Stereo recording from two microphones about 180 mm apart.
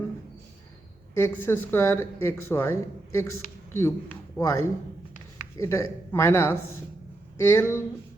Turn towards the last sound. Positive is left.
turn(degrees=15)  # may be behind; listen again after turning